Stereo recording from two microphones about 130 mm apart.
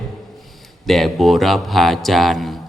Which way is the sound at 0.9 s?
Centre (ahead or behind).